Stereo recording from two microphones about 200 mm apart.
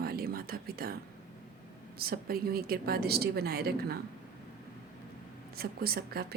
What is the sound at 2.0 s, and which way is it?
A woman's voice, 50° right (ahead or behind).